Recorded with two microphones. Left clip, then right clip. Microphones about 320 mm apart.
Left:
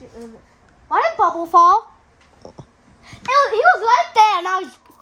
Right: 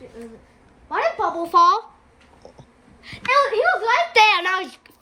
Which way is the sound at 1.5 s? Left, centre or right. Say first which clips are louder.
Left 3 dB; centre.